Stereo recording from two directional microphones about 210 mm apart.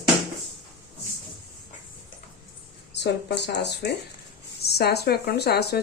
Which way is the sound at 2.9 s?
55° left (ahead or behind).